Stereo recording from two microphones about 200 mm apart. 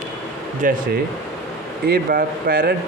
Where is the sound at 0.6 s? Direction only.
40° right (ahead or behind).